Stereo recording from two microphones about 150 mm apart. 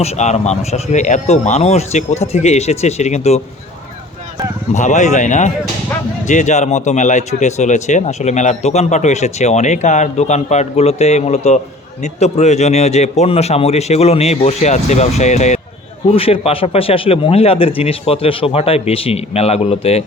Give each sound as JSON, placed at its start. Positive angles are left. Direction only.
{"t": 0.0, "sound": "speech", "side_deg": 50}
{"t": 4.7, "sound": "speech", "side_deg": 50}
{"t": 16.1, "sound": "a man's voice", "side_deg": 40}